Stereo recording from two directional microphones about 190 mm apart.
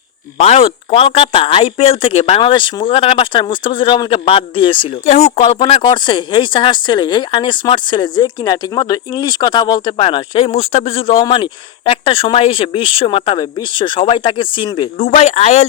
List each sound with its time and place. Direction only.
0.3 s speech: 30° left (ahead or behind)